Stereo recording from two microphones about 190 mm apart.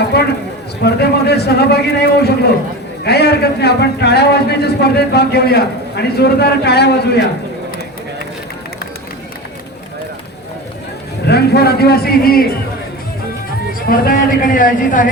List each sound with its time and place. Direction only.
0.1 s a sound: 60° left (ahead or behind)
0.9 s a man's voice: 60° left (ahead or behind)
11.3 s a man's voice: 60° left (ahead or behind)
13.7 s a man's voice: 50° left (ahead or behind)